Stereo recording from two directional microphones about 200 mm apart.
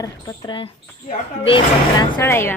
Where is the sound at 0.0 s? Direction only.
25° left (ahead or behind).